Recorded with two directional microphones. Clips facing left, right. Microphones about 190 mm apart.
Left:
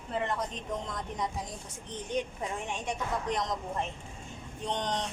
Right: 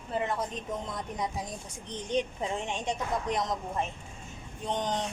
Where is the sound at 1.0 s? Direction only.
10° right (ahead or behind).